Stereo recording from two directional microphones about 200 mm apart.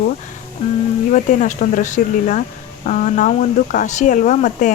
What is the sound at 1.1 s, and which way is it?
Speech, 40° left (ahead or behind).